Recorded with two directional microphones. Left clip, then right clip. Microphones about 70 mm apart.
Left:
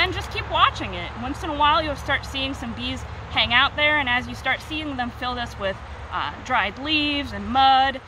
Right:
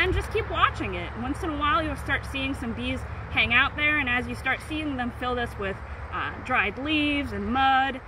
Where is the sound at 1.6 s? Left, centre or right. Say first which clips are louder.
Left 6 dB; left.